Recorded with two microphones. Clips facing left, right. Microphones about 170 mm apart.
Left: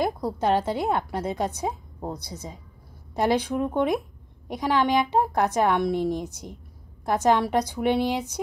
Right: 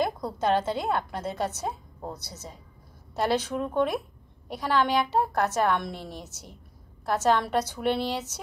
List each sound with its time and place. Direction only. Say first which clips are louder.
0.0 s a woman's voice: left 2 dB; 10° left (ahead or behind)